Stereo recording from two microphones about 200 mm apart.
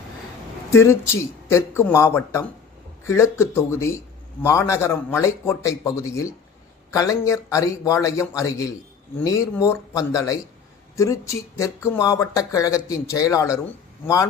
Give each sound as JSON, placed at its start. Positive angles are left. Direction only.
{"t": 0.7, "sound": "speech", "side_deg": 15}